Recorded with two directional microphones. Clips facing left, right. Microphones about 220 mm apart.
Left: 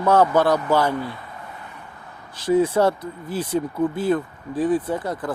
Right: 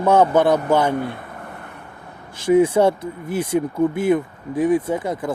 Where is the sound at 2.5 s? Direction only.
15° right (ahead or behind).